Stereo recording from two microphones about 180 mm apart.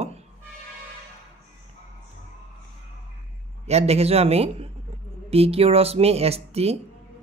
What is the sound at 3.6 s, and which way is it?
Speech, 35° right (ahead or behind).